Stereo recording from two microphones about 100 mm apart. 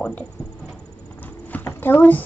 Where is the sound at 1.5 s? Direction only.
20° left (ahead or behind).